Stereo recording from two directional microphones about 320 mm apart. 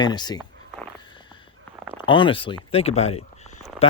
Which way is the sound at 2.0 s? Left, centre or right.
Centre.